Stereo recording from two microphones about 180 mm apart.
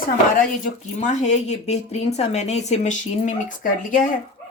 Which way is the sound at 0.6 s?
40° left (ahead or behind).